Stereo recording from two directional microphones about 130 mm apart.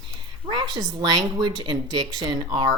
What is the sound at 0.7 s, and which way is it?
Speech, 30° right (ahead or behind).